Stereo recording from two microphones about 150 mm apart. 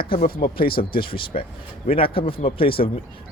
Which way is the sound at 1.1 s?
35° left (ahead or behind).